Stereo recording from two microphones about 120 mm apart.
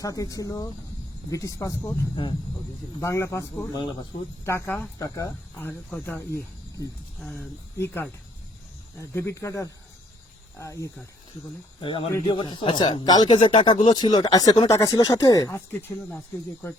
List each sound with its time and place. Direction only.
0.0 s speech: 30° left (ahead or behind)
1.8 s speech: 15° left (ahead or behind)
3.7 s speech: 40° left (ahead or behind)
4.4 s speech: 20° left (ahead or behind)
4.9 s speech: 30° left (ahead or behind)
5.5 s speech: 15° left (ahead or behind)
11.8 s speech: 45° left (ahead or behind); by 16.7 s 20° left (ahead or behind)